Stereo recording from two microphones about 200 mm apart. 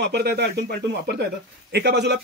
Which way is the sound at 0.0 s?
55° right (ahead or behind).